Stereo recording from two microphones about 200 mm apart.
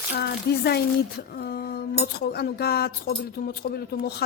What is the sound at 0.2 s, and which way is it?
Speech, 55° left (ahead or behind).